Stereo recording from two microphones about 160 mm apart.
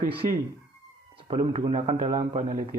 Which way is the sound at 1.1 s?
35° right (ahead or behind).